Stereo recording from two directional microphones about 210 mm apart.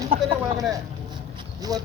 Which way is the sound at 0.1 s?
25° right (ahead or behind).